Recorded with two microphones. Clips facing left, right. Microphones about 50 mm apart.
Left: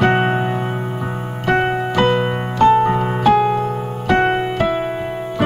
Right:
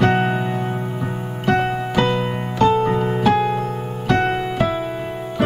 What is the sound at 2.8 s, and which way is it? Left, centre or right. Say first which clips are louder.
Music: left 2 dB; left.